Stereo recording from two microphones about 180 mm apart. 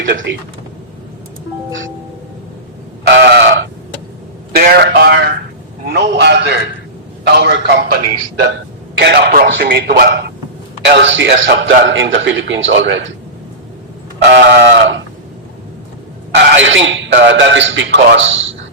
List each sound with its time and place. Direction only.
0.0 s speech: 85° right
3.1 s sheep: 70° right (ahead or behind)
4.5 s a man's voice: 60° right (ahead or behind)
10.8 s a man's voice: 80° right
14.8 s speech: 85° right
16.3 s a man's voice: 80° right